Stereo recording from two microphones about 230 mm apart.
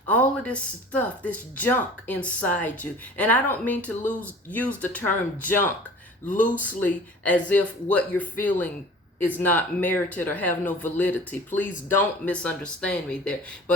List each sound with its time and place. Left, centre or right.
0.1 s speech: centre
6.2 s speech: left
6.7 s speech: centre